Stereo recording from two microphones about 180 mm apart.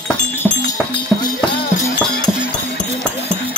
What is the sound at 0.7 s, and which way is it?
Music, 25° left (ahead or behind).